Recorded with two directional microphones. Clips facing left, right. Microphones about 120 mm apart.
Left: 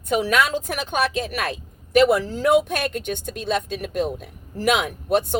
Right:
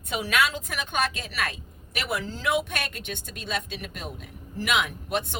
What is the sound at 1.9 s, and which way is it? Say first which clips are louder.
Speech: left 14 dB; 50° left (ahead or behind).